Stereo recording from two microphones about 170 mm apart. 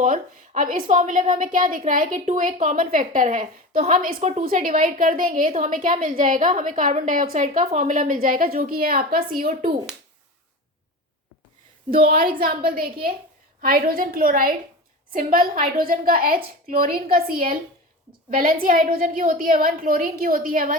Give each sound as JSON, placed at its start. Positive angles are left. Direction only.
{"t": 0.0, "sound": "a woman's voice", "side_deg": -50}
{"t": 11.9, "sound": "a woman's voice", "side_deg": -55}